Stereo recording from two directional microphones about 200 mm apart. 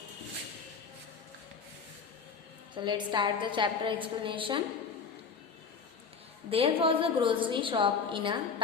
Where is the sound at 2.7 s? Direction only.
20° right (ahead or behind).